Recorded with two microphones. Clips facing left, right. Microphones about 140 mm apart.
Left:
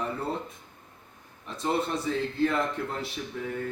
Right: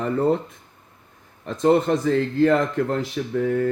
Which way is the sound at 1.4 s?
90° right.